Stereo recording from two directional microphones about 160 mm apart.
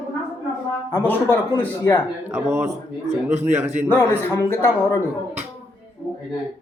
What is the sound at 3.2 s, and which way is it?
Speech, 45° right (ahead or behind).